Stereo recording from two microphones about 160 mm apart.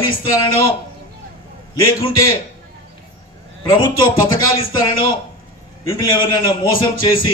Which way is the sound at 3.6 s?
30° left (ahead or behind).